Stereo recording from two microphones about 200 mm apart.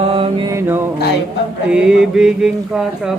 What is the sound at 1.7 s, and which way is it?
Music, 5° right (ahead or behind).